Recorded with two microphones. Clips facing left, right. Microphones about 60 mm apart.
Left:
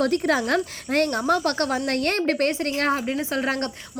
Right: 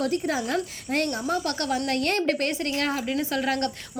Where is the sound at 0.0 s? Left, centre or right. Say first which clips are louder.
Left 4 dB; left.